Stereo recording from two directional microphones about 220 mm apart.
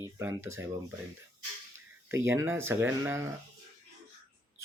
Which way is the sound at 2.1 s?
10° right (ahead or behind).